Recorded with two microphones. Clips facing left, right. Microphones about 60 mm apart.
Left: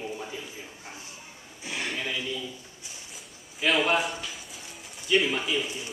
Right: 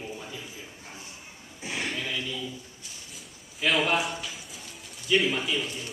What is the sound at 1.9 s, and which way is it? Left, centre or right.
Speech, centre.